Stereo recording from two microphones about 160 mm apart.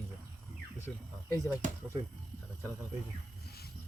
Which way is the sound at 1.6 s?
55° right (ahead or behind).